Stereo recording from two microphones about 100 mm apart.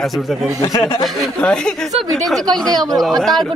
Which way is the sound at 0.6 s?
45° left (ahead or behind).